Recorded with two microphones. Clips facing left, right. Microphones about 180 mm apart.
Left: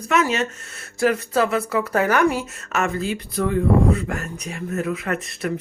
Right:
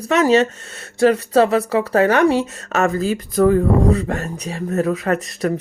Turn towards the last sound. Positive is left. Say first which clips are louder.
# right 6 dB
turn(degrees=-40)  # may be behind; listen again after turning